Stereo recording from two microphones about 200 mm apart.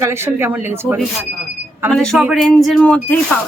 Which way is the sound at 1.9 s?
5° left (ahead or behind).